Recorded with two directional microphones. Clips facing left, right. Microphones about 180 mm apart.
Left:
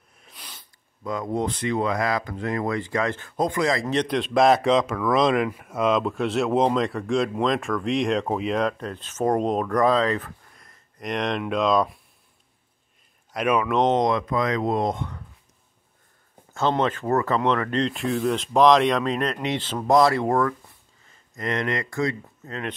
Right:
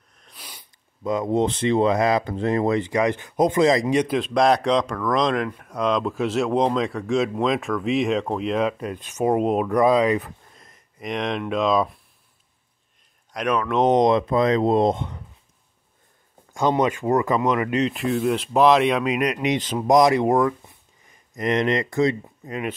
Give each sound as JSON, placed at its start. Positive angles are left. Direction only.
{"t": 0.2, "sound": "sneeze", "side_deg": -5}
{"t": 1.0, "sound": "speech", "side_deg": -20}
{"t": 10.5, "sound": "a sound", "side_deg": -20}
{"t": 11.0, "sound": "speech", "side_deg": 0}
{"t": 13.3, "sound": "speech", "side_deg": 5}
{"t": 13.8, "sound": "speech", "side_deg": -20}
{"t": 16.5, "sound": "speech", "side_deg": -15}